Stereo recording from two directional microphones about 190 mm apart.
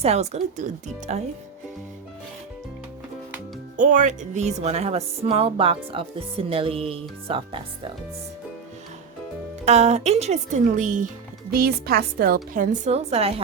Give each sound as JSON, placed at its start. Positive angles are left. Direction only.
{"t": 0.0, "sound": "speech", "side_deg": -35}
{"t": 3.8, "sound": "speech", "side_deg": -40}
{"t": 9.6, "sound": "speech", "side_deg": -35}
{"t": 11.5, "sound": "a woman's voice", "side_deg": -55}